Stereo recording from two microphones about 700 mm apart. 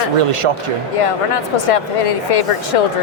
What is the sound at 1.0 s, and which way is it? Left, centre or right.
Speech, left.